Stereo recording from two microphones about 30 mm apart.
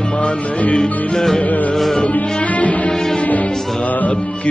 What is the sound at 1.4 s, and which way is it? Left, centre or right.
Music, left.